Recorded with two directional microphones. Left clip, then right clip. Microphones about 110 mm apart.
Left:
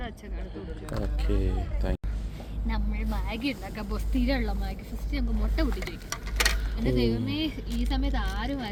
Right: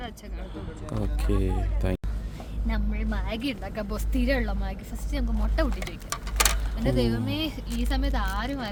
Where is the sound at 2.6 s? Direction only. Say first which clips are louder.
Right 2 dB; 35° right (ahead or behind).